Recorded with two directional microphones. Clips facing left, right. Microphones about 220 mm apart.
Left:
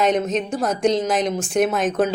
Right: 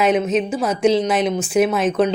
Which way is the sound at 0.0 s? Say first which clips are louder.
Right 3 dB; 5° right (ahead or behind).